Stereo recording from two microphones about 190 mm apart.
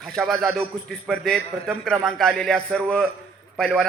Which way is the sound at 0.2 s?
Centre (ahead or behind).